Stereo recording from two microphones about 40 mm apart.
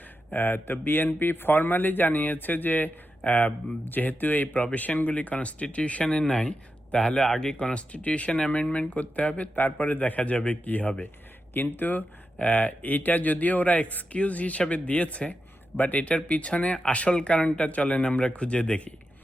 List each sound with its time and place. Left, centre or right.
0.3 s a man's voice: left
3.2 s speech: left
7.2 s speech: centre
7.5 s a man's voice: left
8.9 s speech: left
9.6 s speech: left
10.2 s speech: left
12.4 s a man's voice: left